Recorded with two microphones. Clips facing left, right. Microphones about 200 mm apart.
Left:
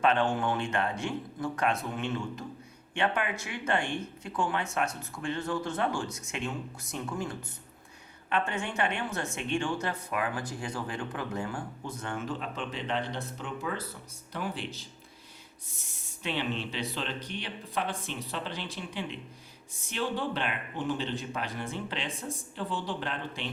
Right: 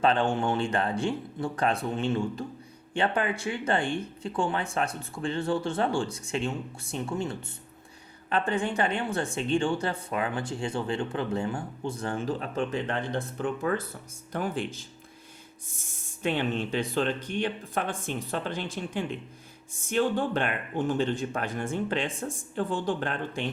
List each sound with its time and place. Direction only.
0.0 s speech: 30° right (ahead or behind); by 23.5 s 50° right (ahead or behind)